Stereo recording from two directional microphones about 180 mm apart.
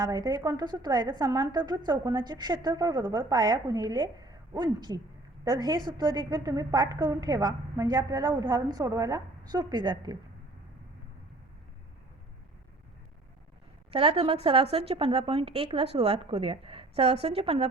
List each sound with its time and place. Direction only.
0.0 s a woman's voice: 20° right (ahead or behind)
13.9 s a woman's voice: 30° right (ahead or behind)